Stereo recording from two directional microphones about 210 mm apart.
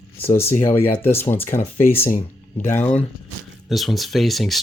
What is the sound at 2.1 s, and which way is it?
Speech, 40° left (ahead or behind).